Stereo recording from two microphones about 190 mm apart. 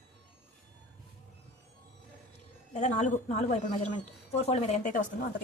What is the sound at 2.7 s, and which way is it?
A woman's voice, 40° left (ahead or behind).